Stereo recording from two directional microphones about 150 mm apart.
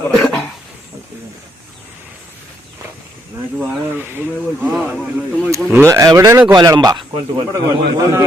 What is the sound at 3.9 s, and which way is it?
A man's voice, 15° right (ahead or behind).